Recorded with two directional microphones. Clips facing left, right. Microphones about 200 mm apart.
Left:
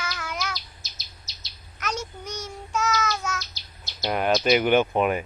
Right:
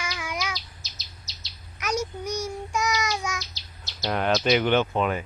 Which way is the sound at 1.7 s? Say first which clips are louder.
Right 4 dB; 10° right (ahead or behind).